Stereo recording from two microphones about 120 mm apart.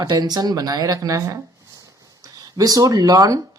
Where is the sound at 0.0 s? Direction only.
30° right (ahead or behind).